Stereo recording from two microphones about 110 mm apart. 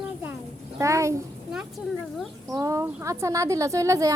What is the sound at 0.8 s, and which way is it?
Speech, 30° right (ahead or behind).